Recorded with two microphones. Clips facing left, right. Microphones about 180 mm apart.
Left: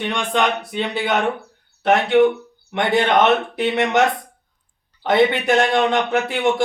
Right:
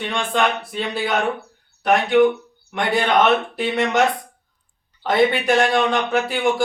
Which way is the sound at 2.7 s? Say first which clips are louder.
Left 2 dB; 20° left (ahead or behind).